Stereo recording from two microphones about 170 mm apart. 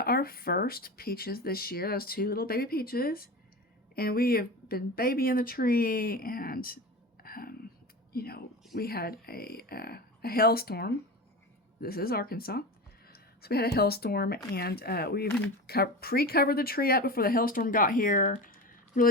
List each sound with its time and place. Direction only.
0.0 s speech: 60° left (ahead or behind)
7.2 s a sound: 60° left (ahead or behind)
8.1 s speech: 65° left (ahead or behind)